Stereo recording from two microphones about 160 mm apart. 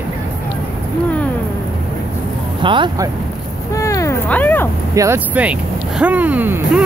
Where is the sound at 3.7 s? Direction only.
20° left (ahead or behind).